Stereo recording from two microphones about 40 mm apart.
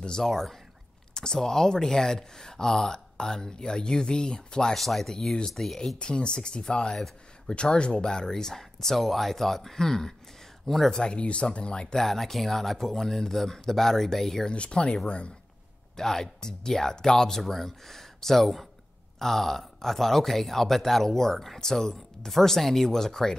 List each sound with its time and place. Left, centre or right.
0.2 s speech: centre
4.7 s speech: centre
5.9 s speech: left; by 11.0 s centre
11.0 s speech: left
11.9 s speech: centre
14.5 s speech: left
16.0 s speech: centre